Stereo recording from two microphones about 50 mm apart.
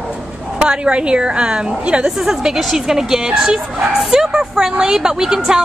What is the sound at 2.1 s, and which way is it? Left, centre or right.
Speech, centre.